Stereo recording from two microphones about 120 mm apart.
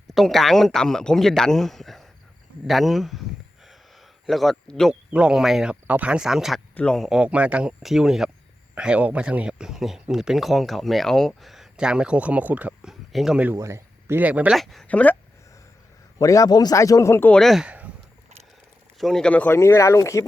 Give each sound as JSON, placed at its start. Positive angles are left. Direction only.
{"t": 0.1, "sound": "speech", "side_deg": 0}
{"t": 4.3, "sound": "speech", "side_deg": 0}
{"t": 13.6, "sound": "speech", "side_deg": -25}
{"t": 14.5, "sound": "speech", "side_deg": 0}
{"t": 14.8, "sound": "speech", "side_deg": 10}
{"t": 16.1, "sound": "speech", "side_deg": 30}
{"t": 17.3, "sound": "speech", "side_deg": 0}
{"t": 17.7, "sound": "a sound", "side_deg": -10}
{"t": 18.9, "sound": "speech", "side_deg": 0}
{"t": 19.5, "sound": "speech", "side_deg": 25}